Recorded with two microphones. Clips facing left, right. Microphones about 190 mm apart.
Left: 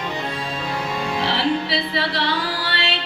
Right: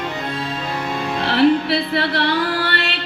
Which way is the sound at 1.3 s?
55° right (ahead or behind).